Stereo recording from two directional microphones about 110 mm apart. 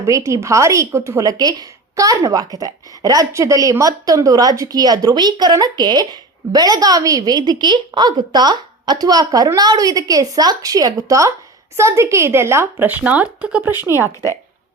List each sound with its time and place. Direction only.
0.0 s a woman's voice: 30° right (ahead or behind)